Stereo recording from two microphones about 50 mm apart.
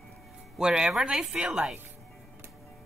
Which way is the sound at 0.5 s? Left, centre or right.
Centre.